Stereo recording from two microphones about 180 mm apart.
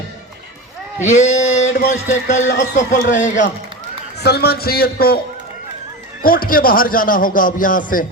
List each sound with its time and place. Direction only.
1.0 s a sound: 40° left (ahead or behind)
1.9 s a man's voice: 45° left (ahead or behind)
2.4 s speech: 90° left
2.7 s a man's voice: 45° left (ahead or behind)
4.2 s a man's voice: 60° left (ahead or behind)
6.2 s a man's voice: 55° left (ahead or behind)